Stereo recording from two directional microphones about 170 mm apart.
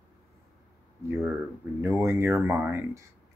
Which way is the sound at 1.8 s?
15° right (ahead or behind).